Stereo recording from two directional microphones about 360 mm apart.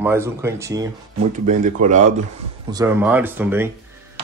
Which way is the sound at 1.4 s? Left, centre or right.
Centre.